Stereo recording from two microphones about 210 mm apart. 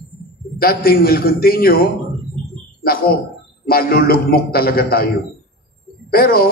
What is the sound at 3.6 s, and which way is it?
A man's voice, 45° left (ahead or behind).